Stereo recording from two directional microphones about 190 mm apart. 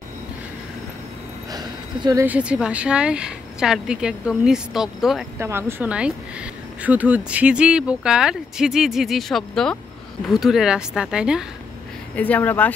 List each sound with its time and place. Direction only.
1.5 s a sound: 20° right (ahead or behind)
2.2 s a woman's voice: 5° right (ahead or behind)
5.4 s a woman's voice: 10° right (ahead or behind)
12.2 s speech: 10° left (ahead or behind)